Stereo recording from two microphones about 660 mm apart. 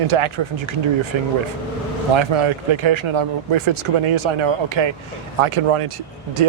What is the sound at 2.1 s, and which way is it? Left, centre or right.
Speech, right.